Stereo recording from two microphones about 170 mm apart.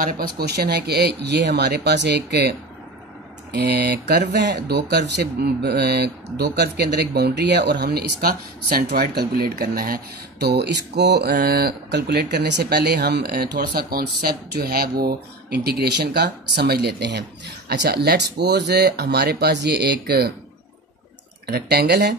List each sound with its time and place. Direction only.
0.0 s speech: 65° right (ahead or behind)
3.5 s speech: 70° right (ahead or behind)
21.5 s speech: 70° right (ahead or behind)